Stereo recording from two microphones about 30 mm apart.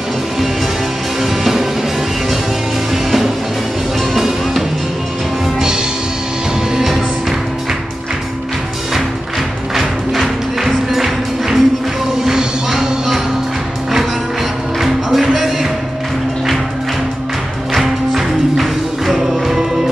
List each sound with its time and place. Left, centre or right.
1.2 s music: centre
4.1 s music: centre
9.8 s music: centre
12.3 s music: centre
14.8 s music: centre
17.7 s music: centre